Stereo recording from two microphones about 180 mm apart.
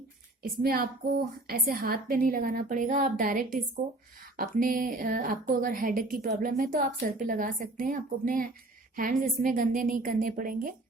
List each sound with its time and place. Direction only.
0.4 s a woman's voice: 55° right (ahead or behind)